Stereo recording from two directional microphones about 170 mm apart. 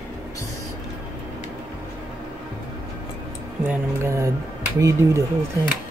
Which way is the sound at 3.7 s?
15° right (ahead or behind).